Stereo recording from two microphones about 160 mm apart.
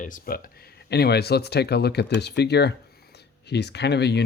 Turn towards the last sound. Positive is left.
turn(degrees=90)